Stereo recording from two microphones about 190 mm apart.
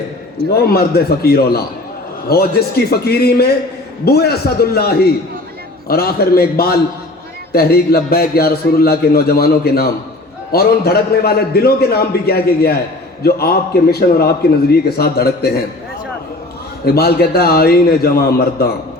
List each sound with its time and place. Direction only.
0.5 s a man's voice: 55° left (ahead or behind)
16.8 s a man's voice: 55° left (ahead or behind)